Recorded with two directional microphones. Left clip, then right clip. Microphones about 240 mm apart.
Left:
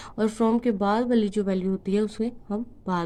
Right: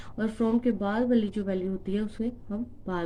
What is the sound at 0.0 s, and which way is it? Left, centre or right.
A woman's voice, left.